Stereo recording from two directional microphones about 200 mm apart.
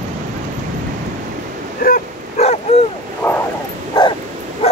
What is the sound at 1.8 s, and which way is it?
Dog, 45° left (ahead or behind).